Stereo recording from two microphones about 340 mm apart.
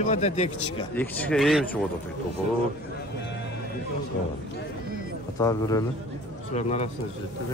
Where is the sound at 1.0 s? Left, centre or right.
Centre.